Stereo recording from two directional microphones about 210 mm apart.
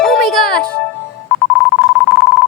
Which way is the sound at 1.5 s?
Centre (ahead or behind).